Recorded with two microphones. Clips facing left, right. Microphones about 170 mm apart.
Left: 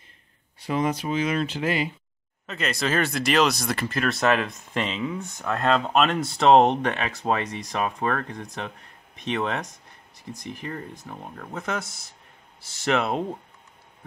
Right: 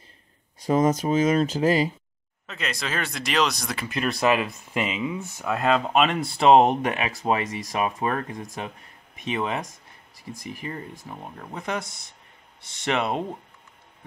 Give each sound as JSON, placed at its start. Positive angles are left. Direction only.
{"t": 0.6, "sound": "speech", "side_deg": -40}
{"t": 2.4, "sound": "speech", "side_deg": 0}